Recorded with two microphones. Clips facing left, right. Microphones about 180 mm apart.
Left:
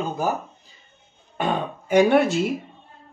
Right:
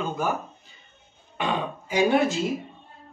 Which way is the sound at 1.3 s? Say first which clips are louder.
Left 3 dB; 50° left (ahead or behind).